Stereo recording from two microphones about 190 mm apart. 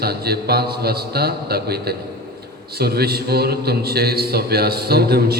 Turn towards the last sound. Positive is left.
turn(degrees=-55)  # may be behind; listen again after turning